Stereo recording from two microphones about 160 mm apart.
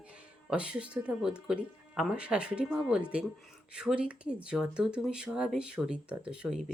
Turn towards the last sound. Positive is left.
turn(degrees=-5)  # may be behind; listen again after turning